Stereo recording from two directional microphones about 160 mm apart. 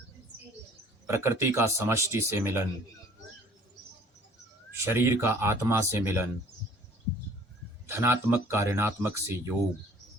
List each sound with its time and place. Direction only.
1.0 s speech: 15° right (ahead or behind)
4.9 s speech: 15° right (ahead or behind)
7.9 s speech: 15° right (ahead or behind)